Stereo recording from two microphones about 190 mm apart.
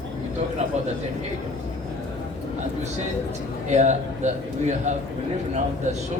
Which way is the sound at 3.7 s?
40° right (ahead or behind).